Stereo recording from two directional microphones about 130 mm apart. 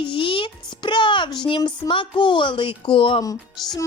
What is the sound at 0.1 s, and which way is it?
Speech, 40° left (ahead or behind).